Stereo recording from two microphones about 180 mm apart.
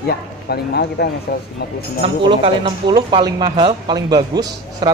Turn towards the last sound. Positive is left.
turn(degrees=-20)  # may be behind; listen again after turning